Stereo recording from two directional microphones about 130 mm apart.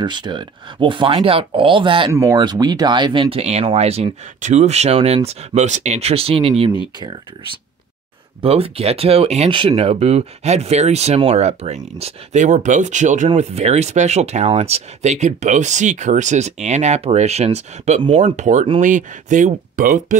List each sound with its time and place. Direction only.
0.0 s speech: 35° right (ahead or behind); by 4.1 s 55° right (ahead or behind)
4.4 s speech: 65° right (ahead or behind); by 6.7 s 45° right (ahead or behind)
8.4 s speech: 45° right (ahead or behind); by 13.3 s 70° right (ahead or behind)
13.4 s speech: 60° right (ahead or behind)
18.0 s speech: 45° right (ahead or behind)
18.3 s speech: 70° right (ahead or behind); by 20.2 s 90° right